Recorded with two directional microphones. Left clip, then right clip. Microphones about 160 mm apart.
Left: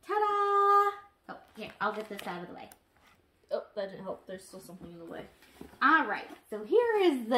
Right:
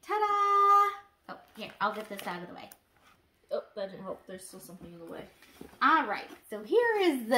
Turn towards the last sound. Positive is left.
turn(degrees=-25)  # may be behind; listen again after turning